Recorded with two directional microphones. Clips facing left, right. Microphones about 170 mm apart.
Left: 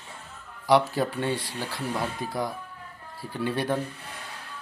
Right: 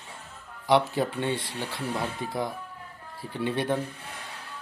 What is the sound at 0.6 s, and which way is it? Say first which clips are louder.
Speech: left 1 dB; 20° right (ahead or behind).